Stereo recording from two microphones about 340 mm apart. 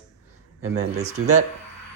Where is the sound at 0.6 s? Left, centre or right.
Right.